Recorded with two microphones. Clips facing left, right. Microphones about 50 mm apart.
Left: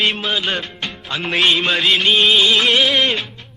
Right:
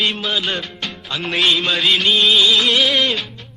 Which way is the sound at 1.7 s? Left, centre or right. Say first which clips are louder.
Left 1 dB; centre.